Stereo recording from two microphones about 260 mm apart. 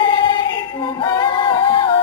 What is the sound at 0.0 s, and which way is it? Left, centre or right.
Music, centre.